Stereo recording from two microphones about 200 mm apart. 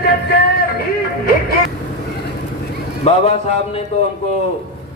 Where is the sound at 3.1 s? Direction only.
35° left (ahead or behind).